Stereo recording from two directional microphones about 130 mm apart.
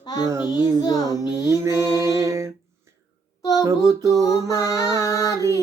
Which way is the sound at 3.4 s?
30° left (ahead or behind).